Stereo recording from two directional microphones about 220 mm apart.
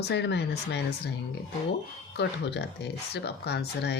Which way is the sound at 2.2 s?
50° left (ahead or behind).